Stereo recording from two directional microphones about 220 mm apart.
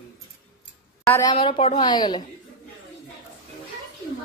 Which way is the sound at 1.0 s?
15° left (ahead or behind).